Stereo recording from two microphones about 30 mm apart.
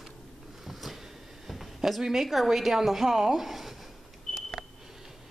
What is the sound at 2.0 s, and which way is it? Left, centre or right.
Speech, centre.